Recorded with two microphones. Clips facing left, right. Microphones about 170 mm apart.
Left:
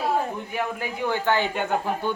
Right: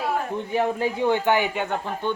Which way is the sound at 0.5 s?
30° right (ahead or behind).